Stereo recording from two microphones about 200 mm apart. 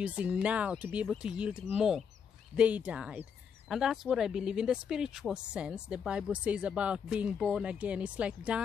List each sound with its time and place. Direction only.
0.0 s speech: 5° right (ahead or behind)